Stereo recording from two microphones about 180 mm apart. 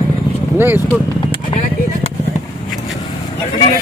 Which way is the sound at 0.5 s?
10° right (ahead or behind).